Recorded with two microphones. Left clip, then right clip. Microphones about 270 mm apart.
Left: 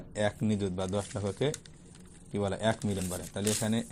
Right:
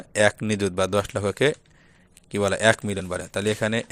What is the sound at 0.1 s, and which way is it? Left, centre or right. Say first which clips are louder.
Speech: right 11 dB; right.